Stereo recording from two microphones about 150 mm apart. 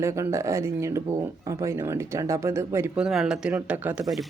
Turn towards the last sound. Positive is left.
turn(degrees=-5)  # may be behind; listen again after turning